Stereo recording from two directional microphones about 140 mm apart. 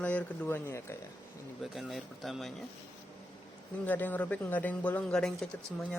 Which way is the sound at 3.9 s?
10° left (ahead or behind).